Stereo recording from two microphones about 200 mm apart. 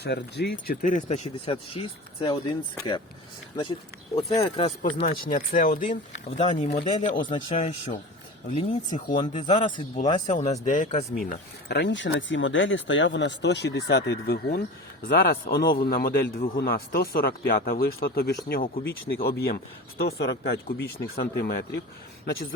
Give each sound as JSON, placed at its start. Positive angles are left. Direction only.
{"t": 0.0, "sound": "speech", "side_deg": 55}
{"t": 4.8, "sound": "speech", "side_deg": 40}
{"t": 6.3, "sound": "speech", "side_deg": 25}
{"t": 7.2, "sound": "speech", "side_deg": 25}
{"t": 8.5, "sound": "speech", "side_deg": 25}
{"t": 9.3, "sound": "speech", "side_deg": 35}